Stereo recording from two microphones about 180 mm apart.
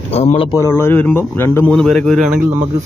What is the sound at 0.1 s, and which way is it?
Speech, 35° left (ahead or behind).